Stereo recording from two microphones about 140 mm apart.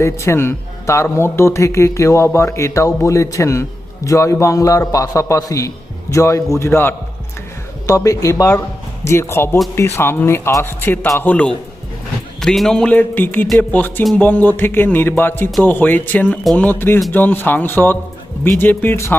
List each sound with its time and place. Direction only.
0.0 s a man's voice: 20° left (ahead or behind)
14.0 s speech: centre (ahead or behind)
14.3 s a man's voice: 15° left (ahead or behind)